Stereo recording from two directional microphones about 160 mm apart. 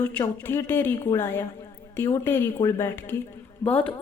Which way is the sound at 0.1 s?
15° left (ahead or behind).